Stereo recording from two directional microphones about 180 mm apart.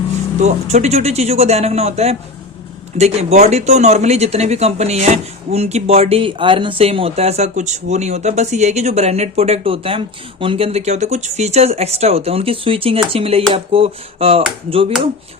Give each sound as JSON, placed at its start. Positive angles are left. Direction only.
{"t": 0.4, "sound": "speech", "side_deg": -40}